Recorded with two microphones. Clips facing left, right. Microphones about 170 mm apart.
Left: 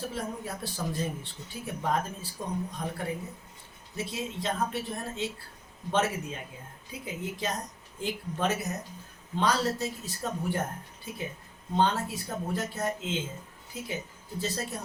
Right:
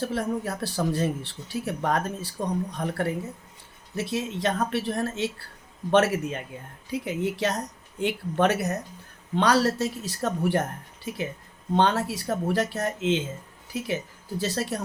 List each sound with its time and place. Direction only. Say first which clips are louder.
0.0 s speech: right 7 dB; 75° right (ahead or behind)